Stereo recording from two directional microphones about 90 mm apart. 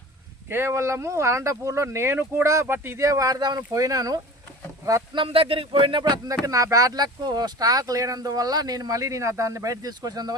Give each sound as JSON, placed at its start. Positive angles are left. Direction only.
{"t": 0.4, "sound": "speech", "side_deg": -25}
{"t": 5.1, "sound": "speech", "side_deg": -85}
{"t": 6.4, "sound": "speech", "side_deg": -40}